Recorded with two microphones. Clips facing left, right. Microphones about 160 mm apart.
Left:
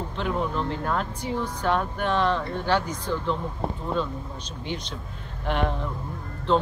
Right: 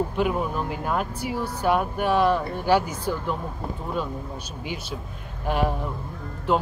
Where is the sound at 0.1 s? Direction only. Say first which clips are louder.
Right 3 dB; 10° right (ahead or behind).